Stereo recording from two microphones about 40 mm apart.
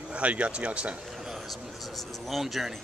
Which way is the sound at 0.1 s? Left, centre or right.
Right.